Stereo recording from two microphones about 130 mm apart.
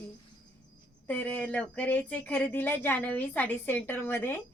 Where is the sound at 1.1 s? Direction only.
10° left (ahead or behind).